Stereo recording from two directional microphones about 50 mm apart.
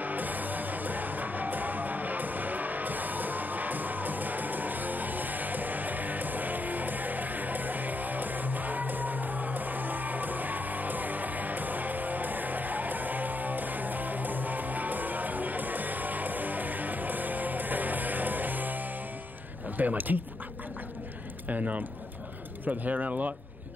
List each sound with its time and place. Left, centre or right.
0.0 s music: right
19.8 s speech: right
21.5 s speech: right